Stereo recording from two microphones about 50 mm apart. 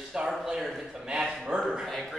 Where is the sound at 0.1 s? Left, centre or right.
Centre.